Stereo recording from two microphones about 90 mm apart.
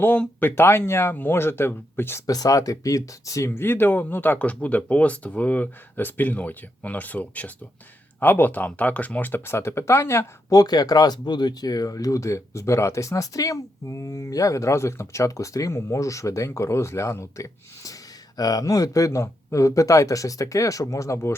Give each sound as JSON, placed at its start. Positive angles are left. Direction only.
{"t": 0.0, "sound": "speech", "side_deg": 15}
{"t": 2.2, "sound": "speech", "side_deg": 45}
{"t": 10.5, "sound": "speech", "side_deg": 45}